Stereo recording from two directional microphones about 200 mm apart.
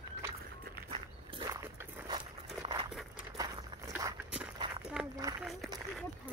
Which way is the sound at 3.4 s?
15° right (ahead or behind).